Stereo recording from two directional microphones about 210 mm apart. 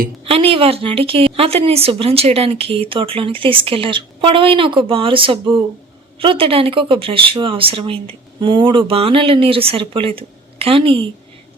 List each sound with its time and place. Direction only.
0.3 s a woman's voice: 25° right (ahead or behind)